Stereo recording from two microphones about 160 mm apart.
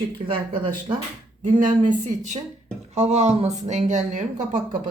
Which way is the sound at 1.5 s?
55° right (ahead or behind).